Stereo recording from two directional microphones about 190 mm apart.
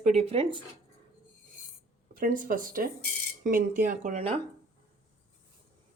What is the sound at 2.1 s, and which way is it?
Speech, 45° right (ahead or behind).